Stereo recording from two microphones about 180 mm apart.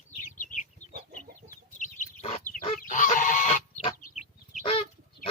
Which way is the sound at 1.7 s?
40° left (ahead or behind).